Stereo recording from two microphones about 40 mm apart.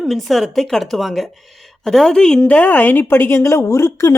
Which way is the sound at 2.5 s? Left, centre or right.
Left.